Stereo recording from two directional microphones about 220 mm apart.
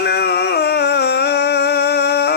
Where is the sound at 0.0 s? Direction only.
45° left (ahead or behind).